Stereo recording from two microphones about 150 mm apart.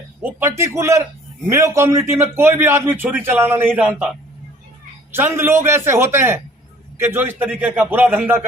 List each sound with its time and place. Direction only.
0.2 s a man's voice: 15° right (ahead or behind)